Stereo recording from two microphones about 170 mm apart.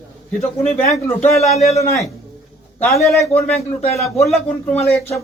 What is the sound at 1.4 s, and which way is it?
Speech, 40° left (ahead or behind).